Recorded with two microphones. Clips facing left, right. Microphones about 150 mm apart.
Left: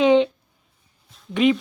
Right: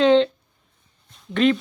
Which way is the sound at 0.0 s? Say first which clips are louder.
Even; 15° left (ahead or behind).